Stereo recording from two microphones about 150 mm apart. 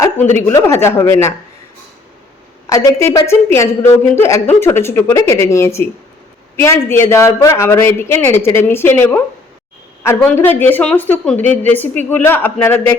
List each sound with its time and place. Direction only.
0.3 s a woman's voice: 15° left (ahead or behind)
2.6 s a woman's voice: 20° left (ahead or behind)
10.3 s a woman's voice: 15° left (ahead or behind)